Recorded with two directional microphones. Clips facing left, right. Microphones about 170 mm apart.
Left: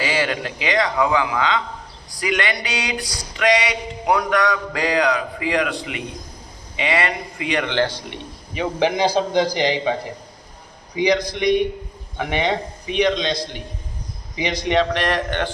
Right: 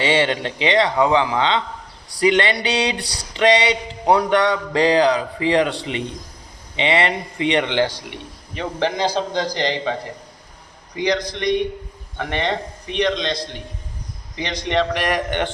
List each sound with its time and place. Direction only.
0.0 s a sound: 25° right (ahead or behind)
8.5 s a man's voice: 10° left (ahead or behind)
15.0 s speech: 15° right (ahead or behind)